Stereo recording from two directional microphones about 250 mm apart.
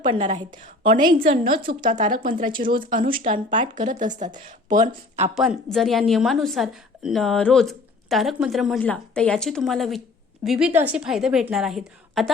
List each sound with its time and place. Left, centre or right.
0.0 s speech: right
5.3 s a woman's voice: centre